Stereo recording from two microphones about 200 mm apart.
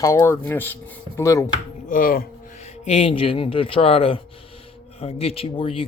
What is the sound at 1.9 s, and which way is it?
Speech, 45° left (ahead or behind).